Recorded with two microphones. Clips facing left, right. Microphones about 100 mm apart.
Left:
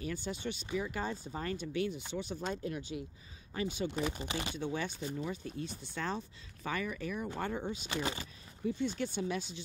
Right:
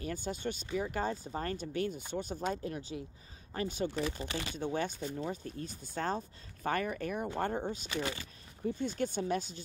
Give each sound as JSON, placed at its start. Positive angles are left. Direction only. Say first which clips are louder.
{"t": 0.0, "sound": "speech", "louder": "right 1 dB", "side_deg": -40}
{"t": 2.5, "sound": "speech", "louder": "even", "side_deg": -35}
{"t": 3.5, "sound": "speech", "louder": "right 1 dB", "side_deg": -45}
{"t": 3.9, "sound": "speech", "louder": "even", "side_deg": 20}
{"t": 4.7, "sound": "speech", "louder": "right 2 dB", "side_deg": -45}
{"t": 7.9, "sound": "speech", "louder": "left 2 dB", "side_deg": 25}
{"t": 8.6, "sound": "speech", "louder": "right 1 dB", "side_deg": -45}